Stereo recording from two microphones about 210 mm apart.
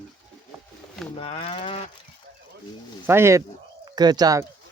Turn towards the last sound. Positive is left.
turn(degrees=-15)  # may be behind; listen again after turning